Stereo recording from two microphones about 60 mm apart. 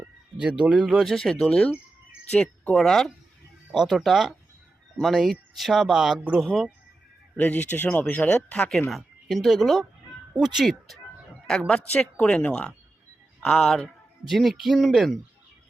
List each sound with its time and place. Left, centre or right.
0.3 s speech: centre
0.9 s speech: centre
2.3 s speech: left
2.7 s speech: centre
6.1 s speech: right
6.4 s speech: centre
7.3 s speech: left
8.9 s speech: centre
14.3 s speech: centre